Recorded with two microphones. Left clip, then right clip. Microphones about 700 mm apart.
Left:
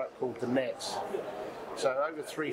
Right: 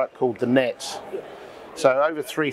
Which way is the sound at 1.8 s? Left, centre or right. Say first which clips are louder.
Right 12 dB; right.